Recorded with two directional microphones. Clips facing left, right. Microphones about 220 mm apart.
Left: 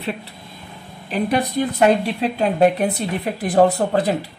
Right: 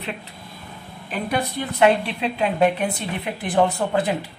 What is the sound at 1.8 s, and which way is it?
Speech, 40° left (ahead or behind).